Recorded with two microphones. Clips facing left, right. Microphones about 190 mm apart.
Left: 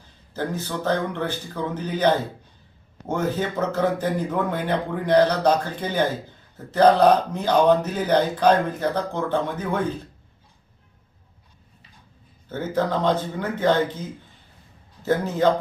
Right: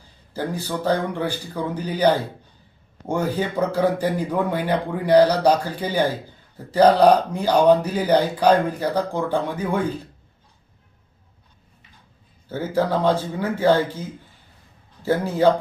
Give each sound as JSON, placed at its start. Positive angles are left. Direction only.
{"t": 0.3, "sound": "speech", "side_deg": -10}
{"t": 12.5, "sound": "speech", "side_deg": -10}
{"t": 15.0, "sound": "speech", "side_deg": -10}